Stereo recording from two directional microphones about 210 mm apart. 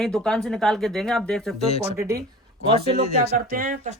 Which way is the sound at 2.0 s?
10° right (ahead or behind).